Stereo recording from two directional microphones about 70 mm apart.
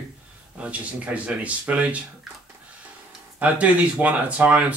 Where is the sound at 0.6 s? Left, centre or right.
Centre.